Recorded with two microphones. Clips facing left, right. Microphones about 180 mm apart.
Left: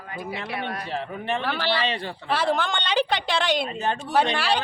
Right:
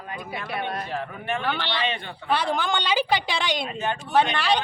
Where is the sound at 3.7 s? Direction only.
35° left (ahead or behind).